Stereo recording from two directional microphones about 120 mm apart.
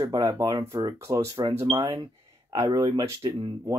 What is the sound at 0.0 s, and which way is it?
Speech, 35° right (ahead or behind).